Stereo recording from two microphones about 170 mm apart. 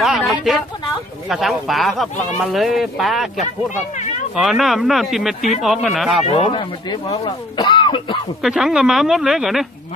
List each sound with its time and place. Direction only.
0.0 s speech: centre (ahead or behind)
6.2 s speech: 35° left (ahead or behind)
8.4 s speech: 5° right (ahead or behind)